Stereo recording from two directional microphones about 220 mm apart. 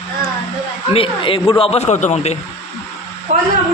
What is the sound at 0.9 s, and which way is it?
A man's voice, 25° left (ahead or behind).